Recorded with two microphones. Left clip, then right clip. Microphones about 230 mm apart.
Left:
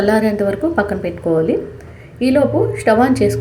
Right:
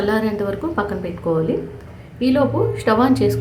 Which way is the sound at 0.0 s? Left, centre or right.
Centre.